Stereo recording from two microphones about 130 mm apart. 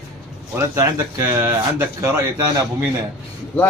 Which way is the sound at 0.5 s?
25° right (ahead or behind).